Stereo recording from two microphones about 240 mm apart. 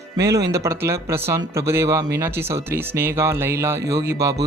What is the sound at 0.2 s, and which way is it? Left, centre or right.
Speech, centre.